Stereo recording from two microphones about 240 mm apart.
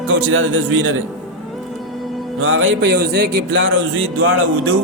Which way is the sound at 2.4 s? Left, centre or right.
Right.